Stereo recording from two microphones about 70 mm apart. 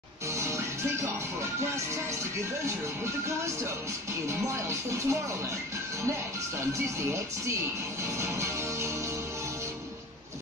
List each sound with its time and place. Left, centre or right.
4.3 s speech: right